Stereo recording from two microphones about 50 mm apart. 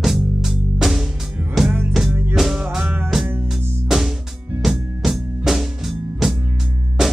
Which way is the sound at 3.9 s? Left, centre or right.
Centre.